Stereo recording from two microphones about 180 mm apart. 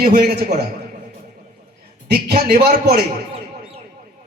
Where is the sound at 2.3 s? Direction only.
55° right (ahead or behind).